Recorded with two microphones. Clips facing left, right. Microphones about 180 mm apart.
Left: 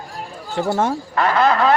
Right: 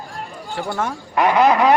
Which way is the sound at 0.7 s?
25° left (ahead or behind).